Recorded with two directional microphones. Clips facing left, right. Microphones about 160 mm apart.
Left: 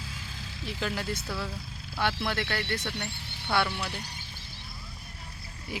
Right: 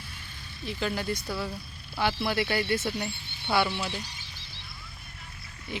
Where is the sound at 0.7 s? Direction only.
Centre (ahead or behind).